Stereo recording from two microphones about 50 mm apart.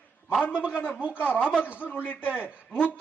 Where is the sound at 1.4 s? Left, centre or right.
Centre.